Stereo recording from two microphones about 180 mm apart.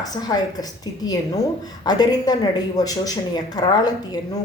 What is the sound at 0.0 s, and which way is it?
A woman's voice, 20° left (ahead or behind).